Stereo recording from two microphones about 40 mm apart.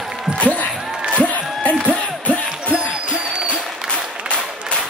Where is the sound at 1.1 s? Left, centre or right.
Left.